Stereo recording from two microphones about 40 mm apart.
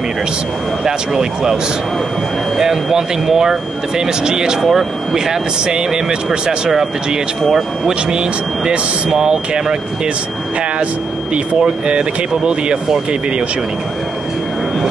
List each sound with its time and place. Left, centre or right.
0.8 s speech: centre
2.6 s speech: centre
11.3 s speech: right